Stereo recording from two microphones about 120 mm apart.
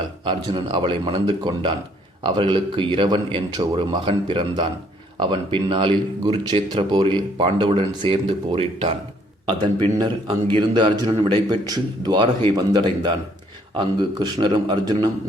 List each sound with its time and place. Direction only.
0.3 s speech: 40° right (ahead or behind)
9.5 s a man's voice: 40° right (ahead or behind)